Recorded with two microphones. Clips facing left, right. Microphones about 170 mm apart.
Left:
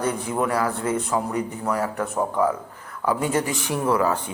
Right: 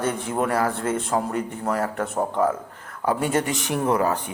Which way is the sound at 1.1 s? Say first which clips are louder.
Even; 45° right (ahead or behind).